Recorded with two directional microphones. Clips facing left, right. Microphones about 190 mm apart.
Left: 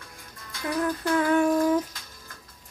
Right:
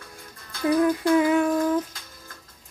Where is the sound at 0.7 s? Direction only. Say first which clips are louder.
Right 6 dB; 15° right (ahead or behind).